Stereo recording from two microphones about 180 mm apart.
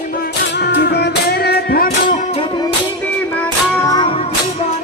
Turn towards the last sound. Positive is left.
turn(degrees=25)  # may be behind; listen again after turning